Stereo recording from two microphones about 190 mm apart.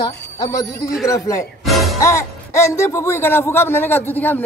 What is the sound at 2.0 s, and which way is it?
A man's voice, 15° left (ahead or behind).